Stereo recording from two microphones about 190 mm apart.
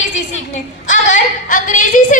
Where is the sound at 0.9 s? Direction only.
40° left (ahead or behind).